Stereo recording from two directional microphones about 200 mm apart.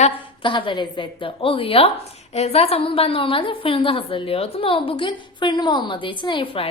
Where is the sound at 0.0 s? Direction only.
25° left (ahead or behind).